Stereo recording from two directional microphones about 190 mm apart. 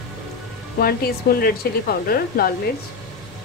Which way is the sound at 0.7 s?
55° left (ahead or behind).